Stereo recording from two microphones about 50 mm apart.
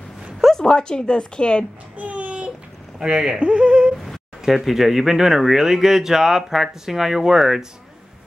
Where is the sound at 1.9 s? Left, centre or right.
Right.